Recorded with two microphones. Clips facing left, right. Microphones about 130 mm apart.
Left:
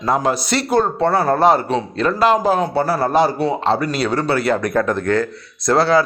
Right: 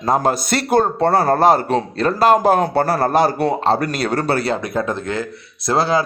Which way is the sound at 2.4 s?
55° right (ahead or behind).